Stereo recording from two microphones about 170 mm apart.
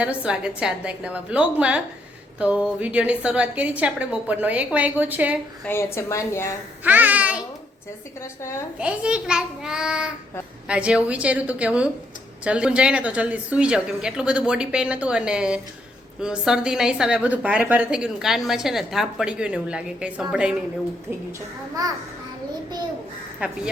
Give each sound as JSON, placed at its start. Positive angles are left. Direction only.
{"t": 0.0, "sound": "a woman's voice", "side_deg": -5}
{"t": 5.6, "sound": "speech", "side_deg": 15}
{"t": 6.8, "sound": "babbling", "side_deg": -10}
{"t": 8.2, "sound": "speech", "side_deg": 15}
{"t": 8.8, "sound": "a woman's voice", "side_deg": -5}
{"t": 21.8, "sound": "a child's voice", "side_deg": -20}